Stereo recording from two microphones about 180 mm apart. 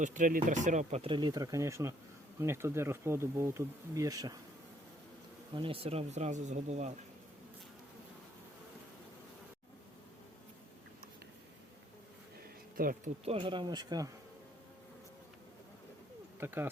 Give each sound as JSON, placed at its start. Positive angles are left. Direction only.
{"t": 0.0, "sound": "speech", "side_deg": -45}
{"t": 5.5, "sound": "speech", "side_deg": -30}
{"t": 12.7, "sound": "speech", "side_deg": -50}
{"t": 13.2, "sound": "speech", "side_deg": -30}
{"t": 16.4, "sound": "speech", "side_deg": -10}